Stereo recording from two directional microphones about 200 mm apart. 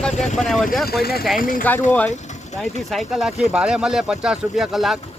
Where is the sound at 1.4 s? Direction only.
45° left (ahead or behind).